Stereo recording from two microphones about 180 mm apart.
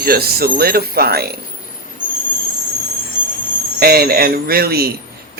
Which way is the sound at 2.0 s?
50° left (ahead or behind).